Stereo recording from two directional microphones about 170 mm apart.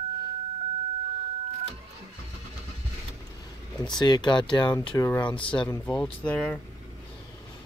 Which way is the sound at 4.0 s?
25° left (ahead or behind).